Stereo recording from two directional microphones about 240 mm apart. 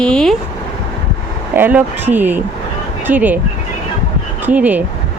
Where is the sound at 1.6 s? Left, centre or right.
Centre.